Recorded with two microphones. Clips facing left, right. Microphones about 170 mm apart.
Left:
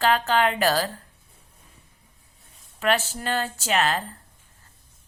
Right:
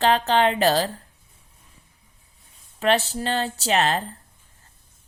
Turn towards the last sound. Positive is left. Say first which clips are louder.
# right 2 dB
turn(degrees=-35)  # may be behind; listen again after turning